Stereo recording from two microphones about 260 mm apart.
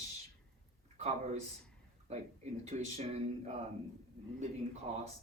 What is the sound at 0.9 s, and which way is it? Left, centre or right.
Speech, right.